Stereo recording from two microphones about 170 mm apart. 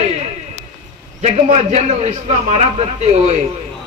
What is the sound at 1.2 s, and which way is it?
A man's voice, 40° right (ahead or behind).